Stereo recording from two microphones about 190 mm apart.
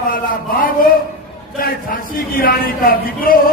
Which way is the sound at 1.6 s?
50° left (ahead or behind).